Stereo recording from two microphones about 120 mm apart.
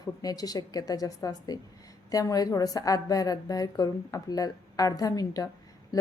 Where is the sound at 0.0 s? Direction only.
30° left (ahead or behind).